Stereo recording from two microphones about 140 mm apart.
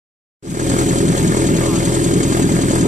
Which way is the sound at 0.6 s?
60° right (ahead or behind).